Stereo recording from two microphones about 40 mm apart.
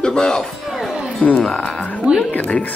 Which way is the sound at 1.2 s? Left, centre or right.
Left.